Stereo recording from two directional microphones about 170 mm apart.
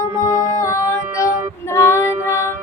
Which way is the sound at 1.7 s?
15° left (ahead or behind).